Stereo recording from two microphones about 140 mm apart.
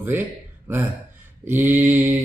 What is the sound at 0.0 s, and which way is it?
Speech, 15° right (ahead or behind).